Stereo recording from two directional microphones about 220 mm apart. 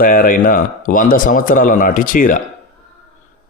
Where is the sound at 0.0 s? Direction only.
40° left (ahead or behind).